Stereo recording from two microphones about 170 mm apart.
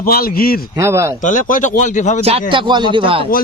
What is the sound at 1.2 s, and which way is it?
Speech, 50° left (ahead or behind).